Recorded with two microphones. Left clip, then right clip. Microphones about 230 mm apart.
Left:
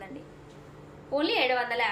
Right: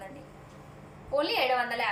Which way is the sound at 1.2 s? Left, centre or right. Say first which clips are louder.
Left 1 dB; centre.